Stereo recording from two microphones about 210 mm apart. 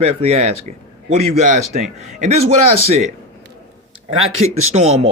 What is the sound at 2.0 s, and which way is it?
Speech, 35° right (ahead or behind).